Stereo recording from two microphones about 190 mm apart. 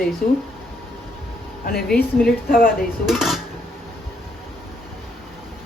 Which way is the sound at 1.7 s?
5° left (ahead or behind).